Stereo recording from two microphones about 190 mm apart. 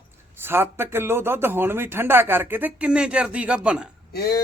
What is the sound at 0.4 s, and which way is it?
A man's voice, 10° right (ahead or behind).